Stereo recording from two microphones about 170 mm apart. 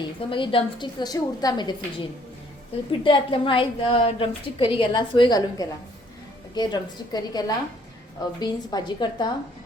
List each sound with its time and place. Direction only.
0.2 s a woman's voice: 30° left (ahead or behind)
3.0 s a woman's voice: 30° left (ahead or behind)